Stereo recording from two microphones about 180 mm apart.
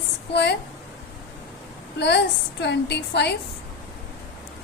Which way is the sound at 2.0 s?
70° left (ahead or behind).